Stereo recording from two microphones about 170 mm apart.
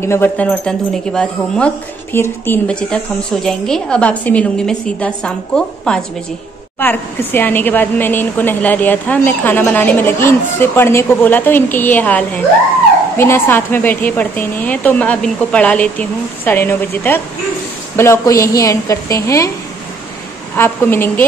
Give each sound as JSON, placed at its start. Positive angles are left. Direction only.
{"t": 0.0, "sound": "a woman's voice", "side_deg": 15}
{"t": 20.5, "sound": "a woman's voice", "side_deg": 15}